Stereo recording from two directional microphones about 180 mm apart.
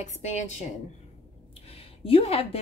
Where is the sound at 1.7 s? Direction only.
30° left (ahead or behind).